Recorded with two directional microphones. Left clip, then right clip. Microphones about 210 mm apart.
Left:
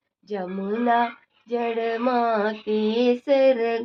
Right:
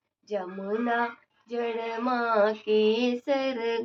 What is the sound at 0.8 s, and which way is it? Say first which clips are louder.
Speech: left 9 dB; 50° left (ahead or behind).